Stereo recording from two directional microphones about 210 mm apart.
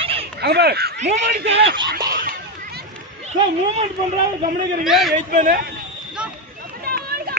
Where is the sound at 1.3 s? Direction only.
30° right (ahead or behind).